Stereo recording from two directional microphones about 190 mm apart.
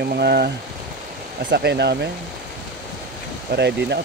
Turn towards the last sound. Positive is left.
turn(degrees=-60)  # may be behind; listen again after turning